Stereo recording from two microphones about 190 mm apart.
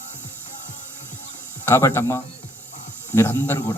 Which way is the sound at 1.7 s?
15° left (ahead or behind).